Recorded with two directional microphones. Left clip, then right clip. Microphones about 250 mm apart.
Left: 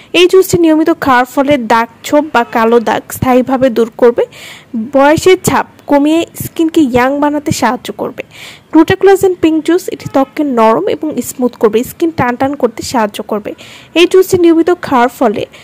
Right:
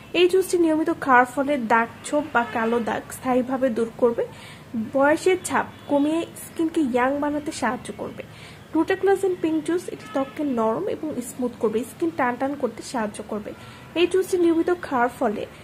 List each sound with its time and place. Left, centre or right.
0.1 s a woman's voice: left